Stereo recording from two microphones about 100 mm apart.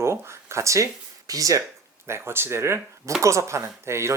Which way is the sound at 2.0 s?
25° right (ahead or behind).